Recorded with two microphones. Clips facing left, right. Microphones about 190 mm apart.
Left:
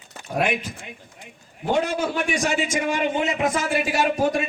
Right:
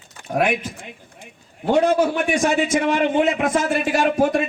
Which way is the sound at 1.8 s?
55° right (ahead or behind).